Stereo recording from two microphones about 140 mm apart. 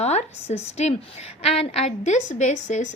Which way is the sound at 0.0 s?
50° left (ahead or behind).